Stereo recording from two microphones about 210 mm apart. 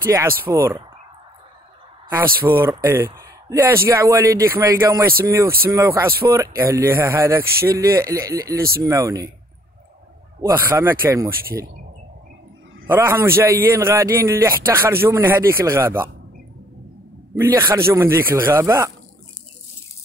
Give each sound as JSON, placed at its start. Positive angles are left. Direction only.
{"t": 0.0, "sound": "a man's voice", "side_deg": -10}
{"t": 2.0, "sound": "a man's voice", "side_deg": -10}
{"t": 10.4, "sound": "a man's voice", "side_deg": -10}
{"t": 12.8, "sound": "a man's voice", "side_deg": -10}
{"t": 17.4, "sound": "a man's voice", "side_deg": -15}